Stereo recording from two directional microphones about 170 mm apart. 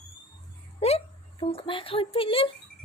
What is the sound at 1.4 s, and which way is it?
Child singing, 35° left (ahead or behind).